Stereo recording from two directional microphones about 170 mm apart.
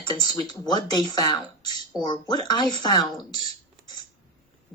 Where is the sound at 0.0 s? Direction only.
25° left (ahead or behind).